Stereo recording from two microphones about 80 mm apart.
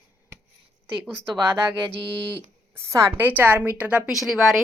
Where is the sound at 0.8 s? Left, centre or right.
Right.